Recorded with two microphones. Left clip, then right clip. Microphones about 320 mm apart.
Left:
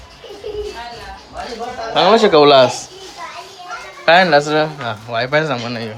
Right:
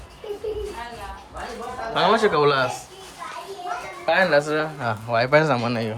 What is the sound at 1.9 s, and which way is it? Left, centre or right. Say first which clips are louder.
Speech: left 8 dB; centre.